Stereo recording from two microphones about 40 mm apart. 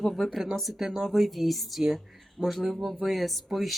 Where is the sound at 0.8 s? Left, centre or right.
Centre.